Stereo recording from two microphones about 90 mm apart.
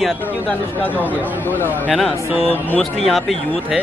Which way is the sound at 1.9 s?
Centre (ahead or behind).